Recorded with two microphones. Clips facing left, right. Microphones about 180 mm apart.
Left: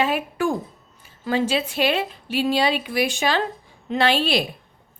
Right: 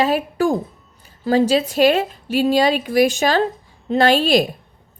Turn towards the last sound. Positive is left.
turn(degrees=-45)  # may be behind; listen again after turning